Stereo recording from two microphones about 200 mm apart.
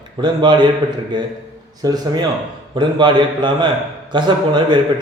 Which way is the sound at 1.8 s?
20° right (ahead or behind).